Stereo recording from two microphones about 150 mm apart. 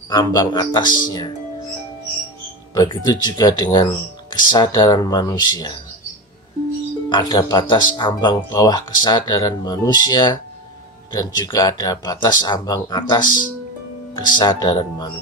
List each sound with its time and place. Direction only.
0.1 s speech: 25° left (ahead or behind)
2.7 s speech: 25° left (ahead or behind)
7.1 s speech: 30° left (ahead or behind)